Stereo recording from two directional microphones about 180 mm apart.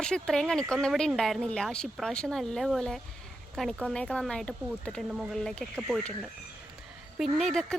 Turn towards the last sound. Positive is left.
turn(degrees=5)  # may be behind; listen again after turning